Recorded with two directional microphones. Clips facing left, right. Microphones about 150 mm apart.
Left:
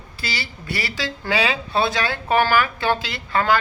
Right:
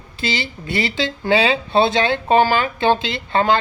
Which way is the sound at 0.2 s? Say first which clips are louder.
Right 7 dB; 20° right (ahead or behind).